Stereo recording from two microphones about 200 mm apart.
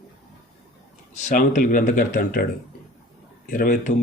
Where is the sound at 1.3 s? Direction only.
40° left (ahead or behind).